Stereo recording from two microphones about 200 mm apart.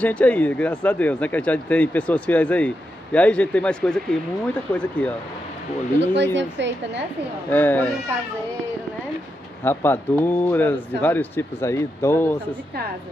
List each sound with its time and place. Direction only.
0.0 s speech: 5° left (ahead or behind)
5.9 s speech: 60° right (ahead or behind)
7.4 s speech: 10° left (ahead or behind)
9.7 s speech: 10° left (ahead or behind)